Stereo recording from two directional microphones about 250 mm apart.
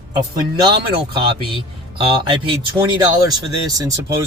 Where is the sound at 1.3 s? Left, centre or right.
Right.